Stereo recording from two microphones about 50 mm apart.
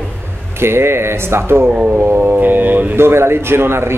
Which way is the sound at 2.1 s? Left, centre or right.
Right.